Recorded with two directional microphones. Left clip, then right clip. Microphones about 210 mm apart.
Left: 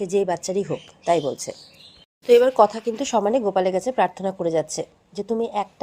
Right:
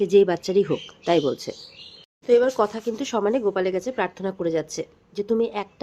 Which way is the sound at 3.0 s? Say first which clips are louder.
Left 2 dB; 5° left (ahead or behind).